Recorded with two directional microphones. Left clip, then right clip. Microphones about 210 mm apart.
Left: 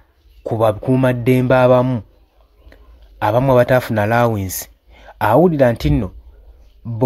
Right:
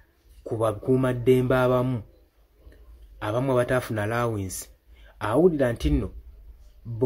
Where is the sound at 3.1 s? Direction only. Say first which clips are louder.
Left 11 dB; 40° left (ahead or behind).